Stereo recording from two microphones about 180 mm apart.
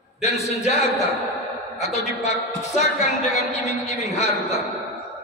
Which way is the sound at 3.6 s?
40° left (ahead or behind).